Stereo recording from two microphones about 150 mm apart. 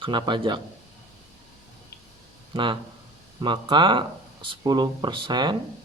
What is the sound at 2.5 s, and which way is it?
Speech, 30° right (ahead or behind).